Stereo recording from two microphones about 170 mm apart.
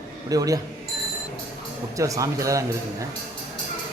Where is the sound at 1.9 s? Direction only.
20° right (ahead or behind).